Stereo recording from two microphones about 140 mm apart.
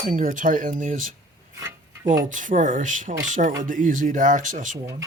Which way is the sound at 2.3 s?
65° right (ahead or behind).